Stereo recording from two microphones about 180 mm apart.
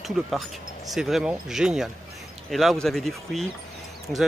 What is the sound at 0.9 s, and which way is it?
A man's voice, centre (ahead or behind).